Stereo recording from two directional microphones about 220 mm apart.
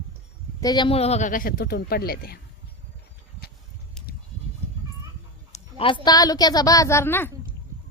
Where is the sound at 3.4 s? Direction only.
45° left (ahead or behind).